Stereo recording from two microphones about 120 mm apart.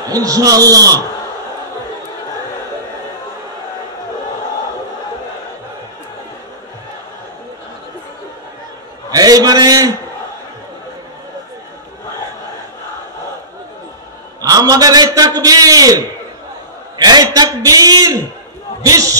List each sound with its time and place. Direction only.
0.1 s a man's voice: 30° right (ahead or behind)
9.1 s a sound: 30° right (ahead or behind)
14.4 s a man's voice: 30° right (ahead or behind)
17.0 s a man's voice: 35° right (ahead or behind)